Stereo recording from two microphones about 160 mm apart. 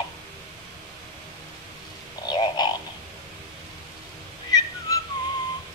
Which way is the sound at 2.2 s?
25° left (ahead or behind).